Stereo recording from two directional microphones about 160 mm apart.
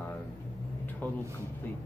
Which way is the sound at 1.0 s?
10° left (ahead or behind).